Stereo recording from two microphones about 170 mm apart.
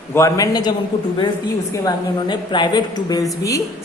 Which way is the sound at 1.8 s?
25° left (ahead or behind).